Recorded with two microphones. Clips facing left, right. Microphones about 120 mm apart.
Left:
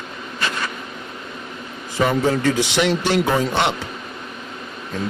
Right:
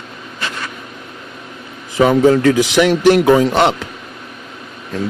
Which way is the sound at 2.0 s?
85° right.